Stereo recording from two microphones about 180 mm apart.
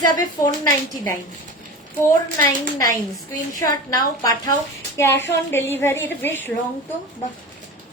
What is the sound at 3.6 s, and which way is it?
A woman's voice, 20° left (ahead or behind).